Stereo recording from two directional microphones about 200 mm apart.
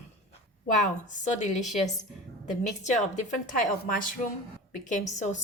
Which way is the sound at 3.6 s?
40° left (ahead or behind).